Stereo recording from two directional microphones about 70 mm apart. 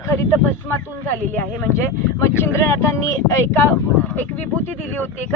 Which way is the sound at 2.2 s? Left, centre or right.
Left.